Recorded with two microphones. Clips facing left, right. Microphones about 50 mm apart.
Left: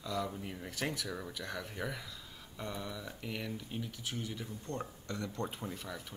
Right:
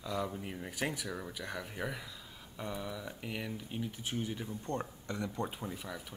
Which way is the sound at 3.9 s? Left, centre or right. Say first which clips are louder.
Right 3 dB; right.